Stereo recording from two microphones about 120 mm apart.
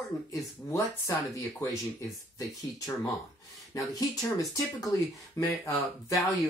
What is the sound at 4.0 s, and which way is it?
Speech, 30° left (ahead or behind).